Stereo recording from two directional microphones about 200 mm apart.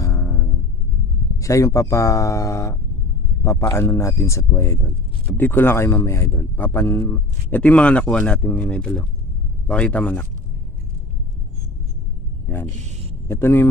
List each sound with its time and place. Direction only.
0.0 s music: 15° left (ahead or behind)
1.4 s speech: 15° left (ahead or behind)
12.5 s speech: 10° left (ahead or behind)